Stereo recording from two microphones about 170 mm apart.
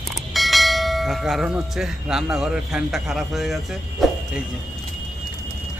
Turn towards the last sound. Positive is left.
turn(degrees=0)  # may be behind; listen again after turning